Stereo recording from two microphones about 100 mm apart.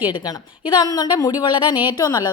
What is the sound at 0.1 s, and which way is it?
Speech, 50° left (ahead or behind).